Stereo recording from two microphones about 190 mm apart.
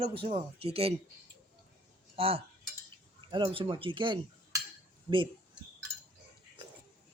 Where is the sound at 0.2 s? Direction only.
30° right (ahead or behind).